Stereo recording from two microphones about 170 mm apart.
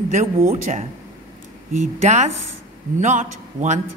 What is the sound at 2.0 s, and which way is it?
A woman's voice, 45° right (ahead or behind).